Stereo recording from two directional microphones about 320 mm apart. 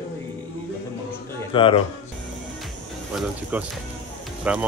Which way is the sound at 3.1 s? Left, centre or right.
Centre.